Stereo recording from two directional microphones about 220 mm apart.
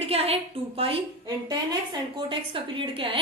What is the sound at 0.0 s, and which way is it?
A woman's voice, 25° right (ahead or behind).